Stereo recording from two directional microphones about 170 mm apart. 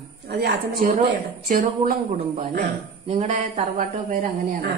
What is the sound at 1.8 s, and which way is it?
Speech, 40° right (ahead or behind).